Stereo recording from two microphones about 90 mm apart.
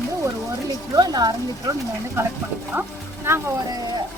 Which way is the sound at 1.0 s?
50° right (ahead or behind).